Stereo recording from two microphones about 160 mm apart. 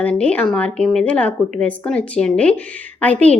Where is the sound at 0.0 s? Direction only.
10° left (ahead or behind).